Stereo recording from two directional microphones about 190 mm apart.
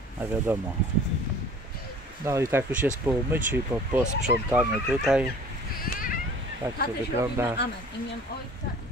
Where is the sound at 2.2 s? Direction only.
15° right (ahead or behind).